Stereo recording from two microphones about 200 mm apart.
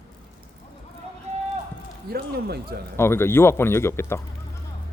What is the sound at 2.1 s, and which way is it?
Speech, 50° right (ahead or behind).